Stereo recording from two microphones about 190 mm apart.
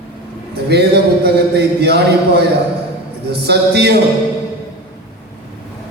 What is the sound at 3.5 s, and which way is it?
Mantra, 60° right (ahead or behind).